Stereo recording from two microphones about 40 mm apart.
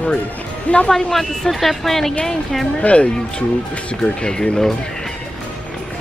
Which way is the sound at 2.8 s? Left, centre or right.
Left.